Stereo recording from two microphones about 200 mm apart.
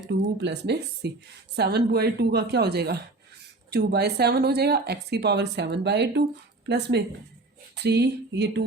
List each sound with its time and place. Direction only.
0.4 s a woman's voice: 60° right (ahead or behind)